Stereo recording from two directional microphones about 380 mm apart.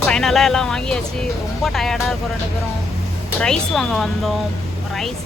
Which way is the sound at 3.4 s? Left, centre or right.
Centre.